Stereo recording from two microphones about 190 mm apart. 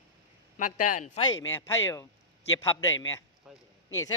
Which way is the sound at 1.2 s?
15° left (ahead or behind).